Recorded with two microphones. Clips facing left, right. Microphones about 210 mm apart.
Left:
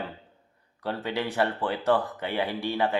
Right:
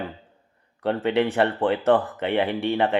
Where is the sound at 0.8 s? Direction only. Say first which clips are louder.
Right 8 dB; 65° right (ahead or behind).